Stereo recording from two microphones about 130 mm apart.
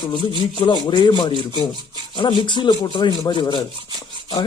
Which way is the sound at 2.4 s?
35° left (ahead or behind).